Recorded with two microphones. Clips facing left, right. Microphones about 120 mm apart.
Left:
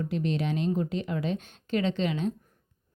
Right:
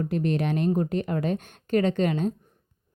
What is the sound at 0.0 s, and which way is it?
Speech, 50° right (ahead or behind).